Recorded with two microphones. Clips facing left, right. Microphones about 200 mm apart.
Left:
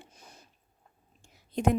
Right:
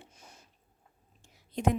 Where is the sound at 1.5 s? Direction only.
45° left (ahead or behind).